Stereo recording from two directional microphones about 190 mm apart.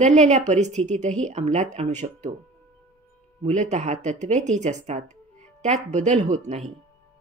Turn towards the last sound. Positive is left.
turn(degrees=-35)  # may be behind; listen again after turning